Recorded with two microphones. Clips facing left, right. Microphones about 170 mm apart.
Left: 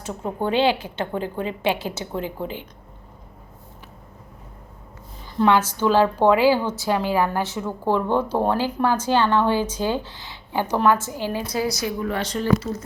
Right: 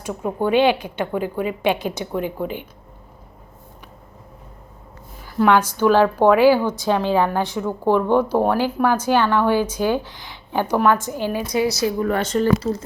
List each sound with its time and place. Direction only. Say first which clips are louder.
0.0 s a woman's voice: right 3 dB; 10° right (ahead or behind)
5.5 s a woman's voice: right 3 dB; 15° right (ahead or behind)
11.9 s speech: right 5 dB; 50° right (ahead or behind)